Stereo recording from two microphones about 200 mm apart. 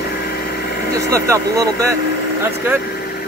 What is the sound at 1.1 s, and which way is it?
Speech, 15° right (ahead or behind).